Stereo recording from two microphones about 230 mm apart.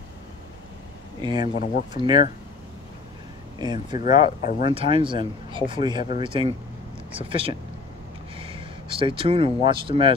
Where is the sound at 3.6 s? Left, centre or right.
Centre.